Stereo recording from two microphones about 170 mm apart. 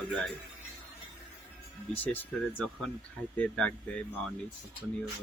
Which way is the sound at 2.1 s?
5° left (ahead or behind).